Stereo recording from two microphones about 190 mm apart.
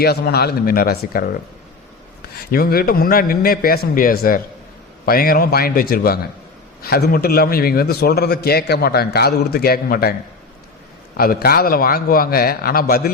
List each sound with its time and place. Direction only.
0.0 s a man's voice: 55° left (ahead or behind)
2.5 s a man's voice: 50° left (ahead or behind)
11.2 s a man's voice: 55° left (ahead or behind)